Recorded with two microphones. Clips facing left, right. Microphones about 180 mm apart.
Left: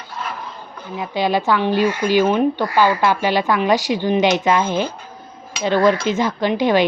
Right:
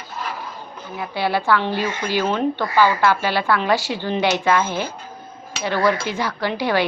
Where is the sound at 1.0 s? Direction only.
15° left (ahead or behind).